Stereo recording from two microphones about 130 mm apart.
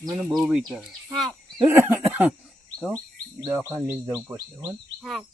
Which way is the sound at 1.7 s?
15° right (ahead or behind).